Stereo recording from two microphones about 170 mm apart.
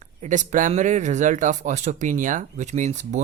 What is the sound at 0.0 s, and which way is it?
Speech, 45° right (ahead or behind).